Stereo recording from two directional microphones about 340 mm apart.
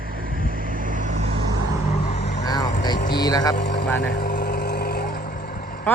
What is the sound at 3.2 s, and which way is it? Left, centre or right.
Speech, centre.